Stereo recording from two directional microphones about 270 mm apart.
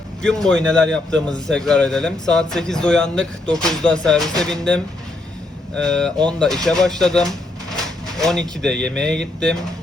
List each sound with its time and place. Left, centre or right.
0.2 s a man's voice: centre